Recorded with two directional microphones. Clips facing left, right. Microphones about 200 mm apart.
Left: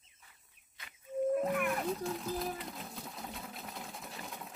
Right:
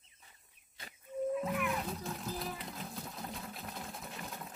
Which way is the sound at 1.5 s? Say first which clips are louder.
Left 2 dB; 55° left (ahead or behind).